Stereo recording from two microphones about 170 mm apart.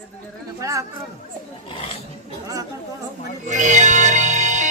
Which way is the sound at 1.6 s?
30° left (ahead or behind).